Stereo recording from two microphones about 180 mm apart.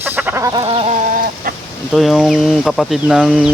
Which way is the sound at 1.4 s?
50° right (ahead or behind).